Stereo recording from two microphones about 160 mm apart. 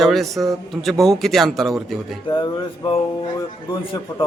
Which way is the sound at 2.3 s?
30° left (ahead or behind).